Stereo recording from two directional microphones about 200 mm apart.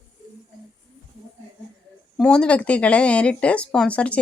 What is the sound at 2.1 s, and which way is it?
A woman's voice, 5° left (ahead or behind).